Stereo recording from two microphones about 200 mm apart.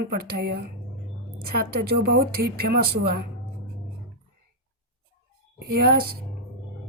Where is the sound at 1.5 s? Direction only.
50° right (ahead or behind).